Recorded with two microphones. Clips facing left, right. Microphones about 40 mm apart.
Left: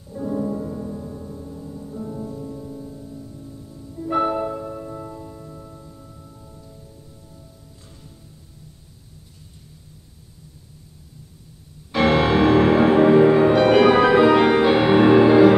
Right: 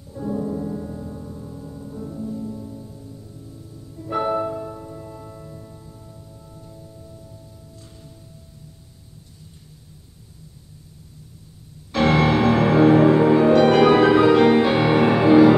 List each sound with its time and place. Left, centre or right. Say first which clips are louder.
0.0 s gong: left 1 dB; centre
2.1 s music: right 1 dB; centre
4.7 s music: left 3 dB; centre
5.1 s music: left 1 dB; centre
5.6 s music: left 1 dB; centre
11.9 s music: even; centre